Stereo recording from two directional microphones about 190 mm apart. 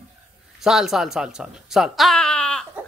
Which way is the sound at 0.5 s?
Centre (ahead or behind).